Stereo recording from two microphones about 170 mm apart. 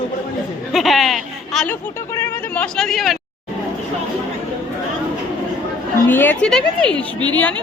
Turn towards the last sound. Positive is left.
turn(degrees=10)  # may be behind; listen again after turning